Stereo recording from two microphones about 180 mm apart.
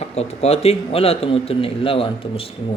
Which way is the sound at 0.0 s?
35° left (ahead or behind).